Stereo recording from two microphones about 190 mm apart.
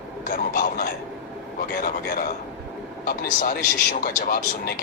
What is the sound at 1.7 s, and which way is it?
Speech, 55° left (ahead or behind).